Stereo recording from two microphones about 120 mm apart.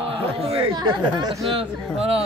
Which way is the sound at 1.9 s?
55° right (ahead or behind).